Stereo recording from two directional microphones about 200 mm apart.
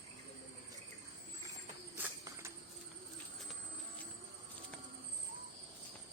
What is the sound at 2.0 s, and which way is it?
Cricket, 15° right (ahead or behind).